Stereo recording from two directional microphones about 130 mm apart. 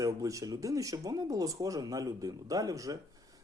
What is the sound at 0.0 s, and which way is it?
Speech, 25° right (ahead or behind).